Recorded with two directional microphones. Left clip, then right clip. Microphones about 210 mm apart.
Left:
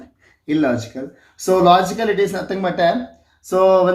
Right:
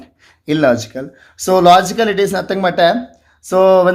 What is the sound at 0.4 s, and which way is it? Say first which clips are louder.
Speech: right 6 dB; 45° right (ahead or behind).